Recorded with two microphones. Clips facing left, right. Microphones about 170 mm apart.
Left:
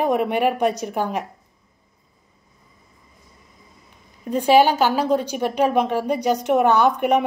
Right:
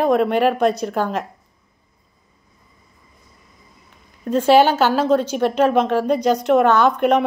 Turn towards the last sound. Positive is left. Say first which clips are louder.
# right 2 dB
turn(degrees=15)  # may be behind; listen again after turning